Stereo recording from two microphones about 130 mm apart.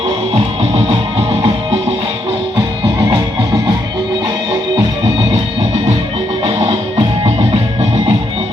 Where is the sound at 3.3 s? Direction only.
20° right (ahead or behind).